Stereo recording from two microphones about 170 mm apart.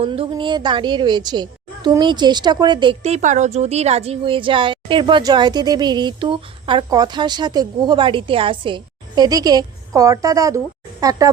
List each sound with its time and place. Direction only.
0.0 s a woman's voice: 30° right (ahead or behind)